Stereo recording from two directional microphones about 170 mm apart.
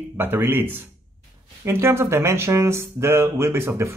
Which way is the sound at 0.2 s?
10° right (ahead or behind).